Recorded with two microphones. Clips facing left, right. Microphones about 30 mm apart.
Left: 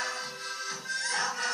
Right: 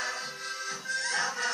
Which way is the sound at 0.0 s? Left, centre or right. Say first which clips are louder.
Even; centre.